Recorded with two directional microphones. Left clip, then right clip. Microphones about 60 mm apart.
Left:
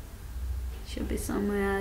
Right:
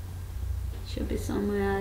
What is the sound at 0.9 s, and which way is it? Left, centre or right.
Speech, centre.